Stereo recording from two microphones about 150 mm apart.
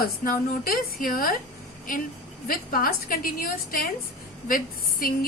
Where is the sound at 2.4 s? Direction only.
75° left (ahead or behind).